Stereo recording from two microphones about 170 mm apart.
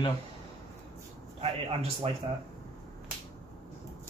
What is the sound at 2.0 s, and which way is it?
Speech, 35° right (ahead or behind).